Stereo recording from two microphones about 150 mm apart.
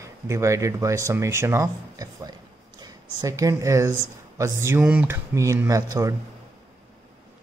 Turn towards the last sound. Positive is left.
turn(degrees=-20)  # may be behind; listen again after turning